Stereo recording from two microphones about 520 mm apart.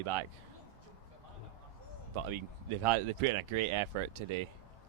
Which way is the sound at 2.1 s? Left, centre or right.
Right.